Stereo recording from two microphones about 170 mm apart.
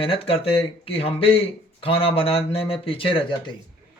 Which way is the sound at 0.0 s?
35° left (ahead or behind).